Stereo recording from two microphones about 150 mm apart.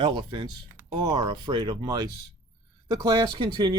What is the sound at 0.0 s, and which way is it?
Speech, 30° right (ahead or behind).